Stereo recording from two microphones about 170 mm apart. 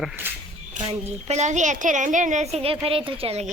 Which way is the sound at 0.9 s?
40° right (ahead or behind).